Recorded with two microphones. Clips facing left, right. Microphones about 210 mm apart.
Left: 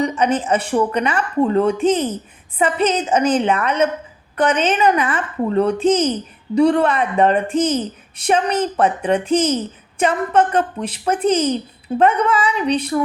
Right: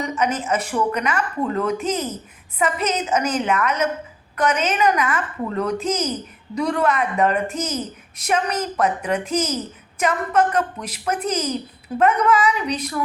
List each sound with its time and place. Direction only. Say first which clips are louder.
0.0 s a woman's voice: left 5 dB; 30° left (ahead or behind)